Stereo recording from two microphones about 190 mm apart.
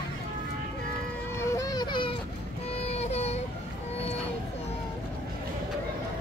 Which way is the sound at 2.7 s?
35° left (ahead or behind).